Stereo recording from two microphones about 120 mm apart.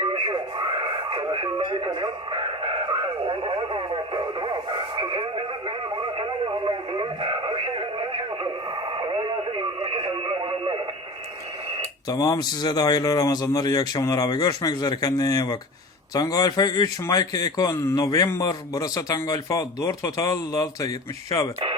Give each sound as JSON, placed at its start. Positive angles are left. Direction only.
{"t": 0.0, "sound": "radio", "side_deg": -45}
{"t": 12.0, "sound": "speech", "side_deg": 30}